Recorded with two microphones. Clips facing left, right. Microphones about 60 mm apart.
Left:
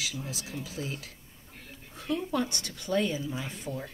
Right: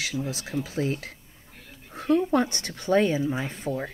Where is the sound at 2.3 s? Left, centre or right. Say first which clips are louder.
Right 6 dB; right.